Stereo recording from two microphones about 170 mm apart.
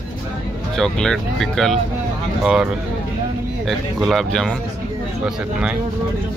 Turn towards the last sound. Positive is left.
turn(degrees=5)  # may be behind; listen again after turning